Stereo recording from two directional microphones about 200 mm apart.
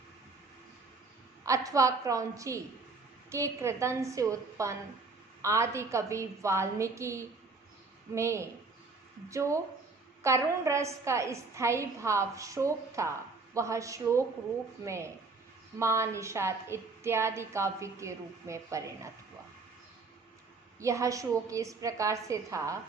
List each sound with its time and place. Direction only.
1.5 s a woman's voice: 15° right (ahead or behind)
20.7 s a woman's voice: 15° right (ahead or behind)